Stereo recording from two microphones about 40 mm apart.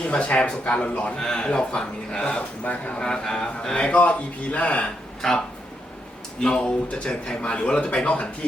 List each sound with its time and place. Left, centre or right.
0.0 s speech: left
1.2 s speech: centre
2.6 s speech: left
3.0 s speech: centre
3.9 s speech: left
5.2 s speech: centre
6.4 s speech: centre